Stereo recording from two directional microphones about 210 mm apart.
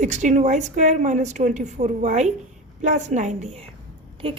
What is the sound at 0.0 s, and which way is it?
A woman's voice, 35° right (ahead or behind).